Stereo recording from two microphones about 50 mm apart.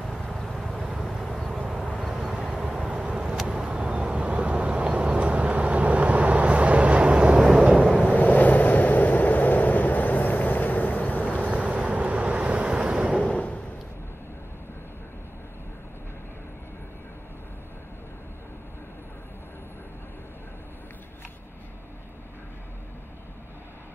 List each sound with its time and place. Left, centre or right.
0.0 s vehicle: centre
2.1 s vehicle: centre
8.1 s vehicle: left
11.4 s vehicle: right
13.2 s a sound: left